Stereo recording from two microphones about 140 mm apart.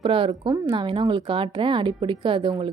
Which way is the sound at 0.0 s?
40° right (ahead or behind).